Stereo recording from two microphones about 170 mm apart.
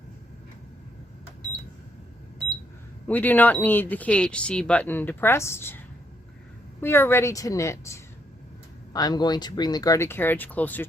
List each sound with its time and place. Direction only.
3.1 s speech: 10° left (ahead or behind)
6.8 s speech: 15° left (ahead or behind)